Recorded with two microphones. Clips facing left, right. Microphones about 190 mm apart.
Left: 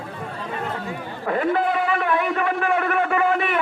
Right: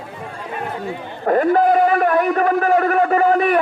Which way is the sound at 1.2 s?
45° right (ahead or behind).